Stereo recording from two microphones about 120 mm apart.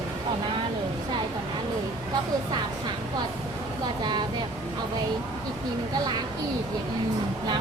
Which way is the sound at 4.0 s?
35° right (ahead or behind).